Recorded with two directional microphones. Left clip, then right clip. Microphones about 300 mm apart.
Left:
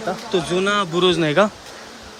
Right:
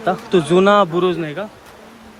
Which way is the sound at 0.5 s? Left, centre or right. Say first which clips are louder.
Right 8 dB; centre.